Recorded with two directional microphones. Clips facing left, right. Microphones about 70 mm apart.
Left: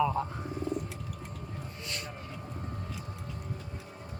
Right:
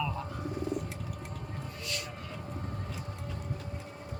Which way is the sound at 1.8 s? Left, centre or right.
Left.